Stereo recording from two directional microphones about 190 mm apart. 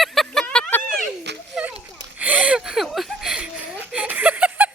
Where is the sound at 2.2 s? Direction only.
5° right (ahead or behind).